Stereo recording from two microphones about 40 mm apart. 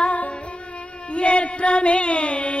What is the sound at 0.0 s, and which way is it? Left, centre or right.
Music, left.